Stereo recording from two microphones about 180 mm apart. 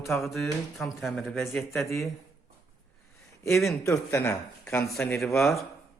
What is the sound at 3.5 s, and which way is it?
Speech, centre (ahead or behind).